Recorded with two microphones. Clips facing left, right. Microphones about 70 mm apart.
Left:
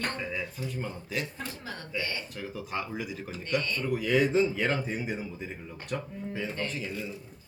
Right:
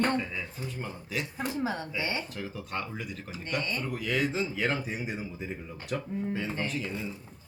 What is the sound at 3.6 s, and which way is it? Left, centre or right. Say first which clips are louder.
Speech: even; centre.